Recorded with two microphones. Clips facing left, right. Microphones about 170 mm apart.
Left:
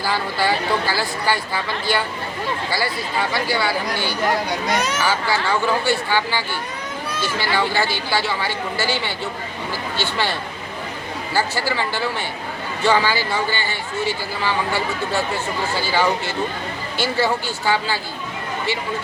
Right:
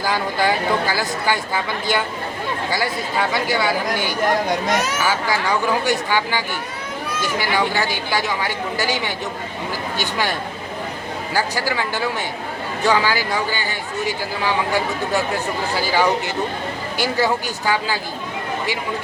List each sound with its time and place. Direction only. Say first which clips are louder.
0.0 s speech: right 2 dB; 15° right (ahead or behind)
3.3 s speech: right 1 dB; 20° right (ahead or behind)
4.7 s speech: even; 5° right (ahead or behind)
11.3 s speech: even; 15° right (ahead or behind)